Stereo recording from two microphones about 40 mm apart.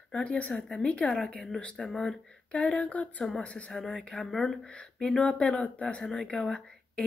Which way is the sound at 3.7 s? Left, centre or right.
Centre.